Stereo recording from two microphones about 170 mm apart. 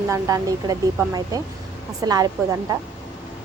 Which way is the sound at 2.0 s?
20° right (ahead or behind).